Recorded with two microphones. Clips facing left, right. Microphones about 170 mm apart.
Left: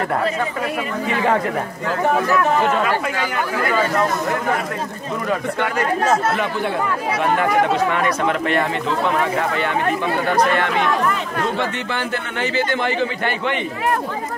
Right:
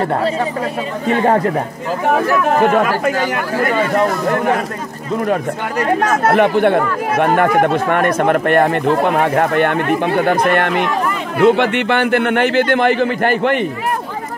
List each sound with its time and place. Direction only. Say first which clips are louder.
1.0 s speech: right 6 dB; 45° right (ahead or behind)
2.6 s speech: right 5 dB; 50° right (ahead or behind)
6.2 s speech: right 9 dB; 60° right (ahead or behind)
11.4 s speech: right 14 dB; 70° right (ahead or behind); by 13.7 s 50° right (ahead or behind)